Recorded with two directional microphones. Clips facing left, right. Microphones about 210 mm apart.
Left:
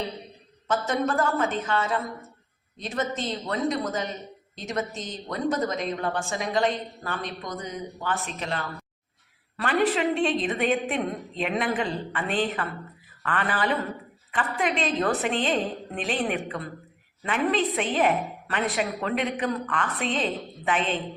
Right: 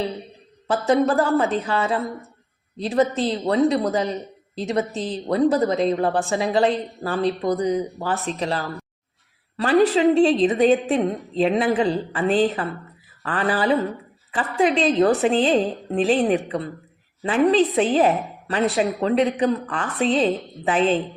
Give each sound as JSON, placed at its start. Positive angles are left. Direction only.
{"t": 0.7, "sound": "a woman's voice", "side_deg": -35}